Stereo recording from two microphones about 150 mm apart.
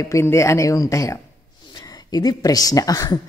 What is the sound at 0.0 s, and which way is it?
A woman's voice, 20° left (ahead or behind).